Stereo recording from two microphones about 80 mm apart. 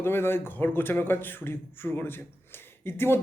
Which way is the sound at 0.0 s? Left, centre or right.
Left.